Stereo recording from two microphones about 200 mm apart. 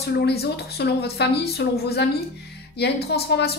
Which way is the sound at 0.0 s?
55° left (ahead or behind).